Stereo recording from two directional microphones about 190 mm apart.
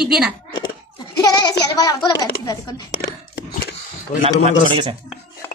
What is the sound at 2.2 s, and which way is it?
Speech, 20° left (ahead or behind).